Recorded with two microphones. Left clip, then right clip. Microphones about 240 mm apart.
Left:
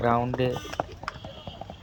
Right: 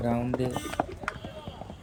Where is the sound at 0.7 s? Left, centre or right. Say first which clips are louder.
Right 1 dB; left.